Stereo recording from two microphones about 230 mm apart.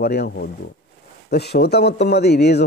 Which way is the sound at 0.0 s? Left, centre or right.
Left.